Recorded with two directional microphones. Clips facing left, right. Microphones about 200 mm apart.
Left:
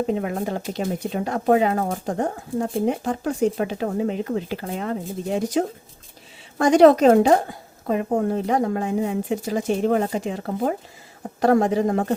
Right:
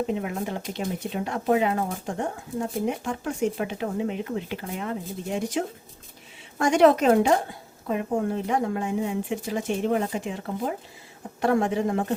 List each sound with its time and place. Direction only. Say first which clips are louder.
0.1 s speech: left 4 dB; 35° left (ahead or behind)